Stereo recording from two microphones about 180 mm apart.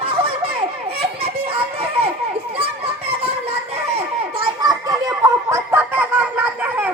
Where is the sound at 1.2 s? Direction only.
30° right (ahead or behind).